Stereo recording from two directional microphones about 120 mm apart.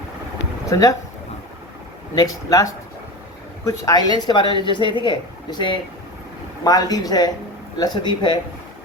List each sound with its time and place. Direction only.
0.7 s speech: 30° left (ahead or behind)
2.1 s speech: 30° left (ahead or behind)